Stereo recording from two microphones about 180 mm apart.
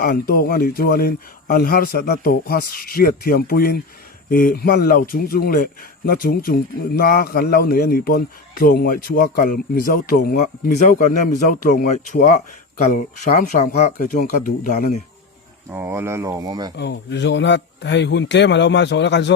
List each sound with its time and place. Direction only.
0.0 s a man's voice: 55° left (ahead or behind)
15.7 s speech: 15° right (ahead or behind)
16.7 s a man's voice: 75° left (ahead or behind)